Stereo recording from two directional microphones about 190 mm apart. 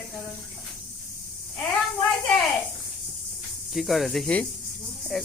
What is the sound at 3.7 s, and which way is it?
Speech, centre (ahead or behind).